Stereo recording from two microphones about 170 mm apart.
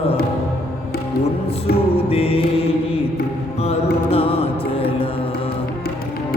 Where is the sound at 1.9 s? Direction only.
35° left (ahead or behind).